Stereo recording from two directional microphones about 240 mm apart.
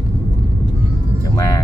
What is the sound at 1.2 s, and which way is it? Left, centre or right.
Music, centre.